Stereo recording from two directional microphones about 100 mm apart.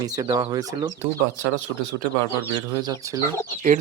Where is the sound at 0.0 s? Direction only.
40° right (ahead or behind).